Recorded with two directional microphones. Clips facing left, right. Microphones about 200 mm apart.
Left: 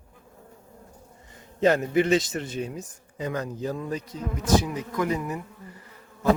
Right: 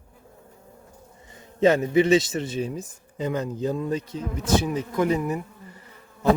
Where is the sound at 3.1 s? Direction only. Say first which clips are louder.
Right 3 dB; 25° right (ahead or behind).